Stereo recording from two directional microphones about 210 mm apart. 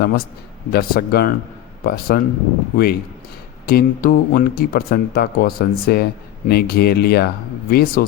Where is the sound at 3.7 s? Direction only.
45° left (ahead or behind).